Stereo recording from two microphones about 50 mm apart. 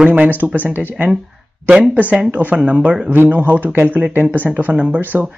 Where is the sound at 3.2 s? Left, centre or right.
Right.